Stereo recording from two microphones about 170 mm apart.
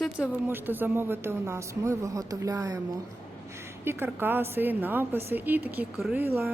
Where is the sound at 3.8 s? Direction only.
15° right (ahead or behind).